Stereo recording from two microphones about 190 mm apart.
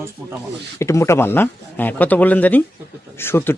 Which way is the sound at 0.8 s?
15° left (ahead or behind).